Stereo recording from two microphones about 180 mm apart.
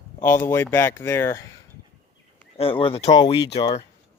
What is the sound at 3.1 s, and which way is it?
Speech, 20° left (ahead or behind).